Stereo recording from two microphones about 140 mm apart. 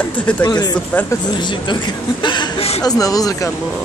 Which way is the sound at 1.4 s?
35° left (ahead or behind).